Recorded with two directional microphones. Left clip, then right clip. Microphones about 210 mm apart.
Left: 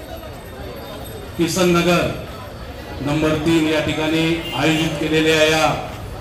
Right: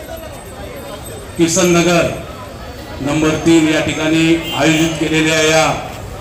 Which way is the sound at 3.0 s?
20° left (ahead or behind).